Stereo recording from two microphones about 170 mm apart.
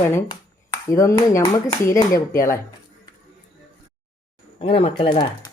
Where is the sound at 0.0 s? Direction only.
15° left (ahead or behind).